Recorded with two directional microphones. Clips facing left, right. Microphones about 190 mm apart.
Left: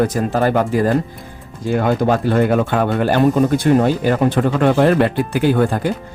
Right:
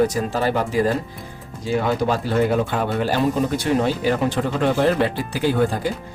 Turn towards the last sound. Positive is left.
turn(degrees=60)  # may be behind; listen again after turning